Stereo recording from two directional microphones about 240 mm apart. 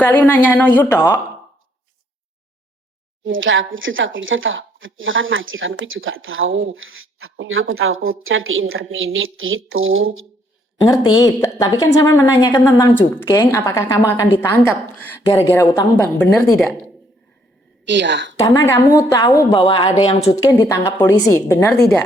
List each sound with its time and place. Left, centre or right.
0.0 s a woman's voice: centre
3.2 s speech: right
10.8 s a woman's voice: centre
17.8 s a woman's voice: right
18.3 s a woman's voice: centre